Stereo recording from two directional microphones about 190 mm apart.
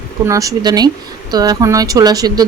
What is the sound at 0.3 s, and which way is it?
Speech, 15° right (ahead or behind).